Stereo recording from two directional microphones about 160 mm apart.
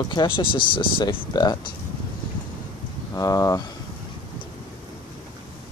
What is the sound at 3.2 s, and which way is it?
Speech, 20° left (ahead or behind).